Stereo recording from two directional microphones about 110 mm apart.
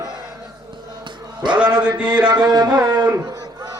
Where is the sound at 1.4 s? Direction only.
45° right (ahead or behind).